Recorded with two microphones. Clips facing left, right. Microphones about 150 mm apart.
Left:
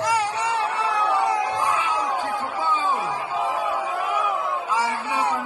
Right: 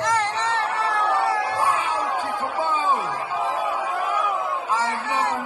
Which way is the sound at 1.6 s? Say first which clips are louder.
Right 1 dB; 45° right (ahead or behind).